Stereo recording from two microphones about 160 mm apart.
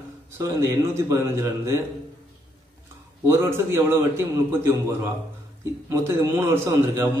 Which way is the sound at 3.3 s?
15° right (ahead or behind).